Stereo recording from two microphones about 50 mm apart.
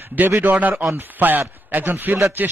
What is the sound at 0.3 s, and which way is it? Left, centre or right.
Speech, right.